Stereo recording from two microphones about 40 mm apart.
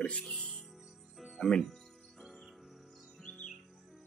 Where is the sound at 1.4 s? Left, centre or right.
Centre.